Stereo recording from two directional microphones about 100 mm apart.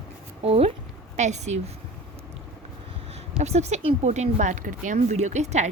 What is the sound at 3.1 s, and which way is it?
Speech, 90° right.